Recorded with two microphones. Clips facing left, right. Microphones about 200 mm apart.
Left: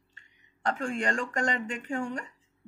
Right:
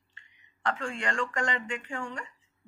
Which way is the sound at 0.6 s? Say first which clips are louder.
Left 2 dB; 40° left (ahead or behind).